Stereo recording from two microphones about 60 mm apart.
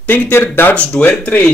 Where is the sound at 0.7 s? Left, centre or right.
Left.